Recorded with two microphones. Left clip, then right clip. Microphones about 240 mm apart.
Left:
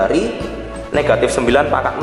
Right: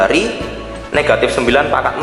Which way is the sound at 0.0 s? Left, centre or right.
Centre.